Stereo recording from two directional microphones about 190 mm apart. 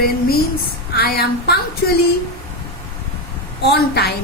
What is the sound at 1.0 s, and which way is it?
Speech, 55° left (ahead or behind).